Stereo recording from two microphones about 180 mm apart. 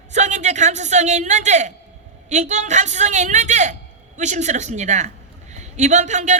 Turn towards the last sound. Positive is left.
turn(degrees=-40)  # may be behind; listen again after turning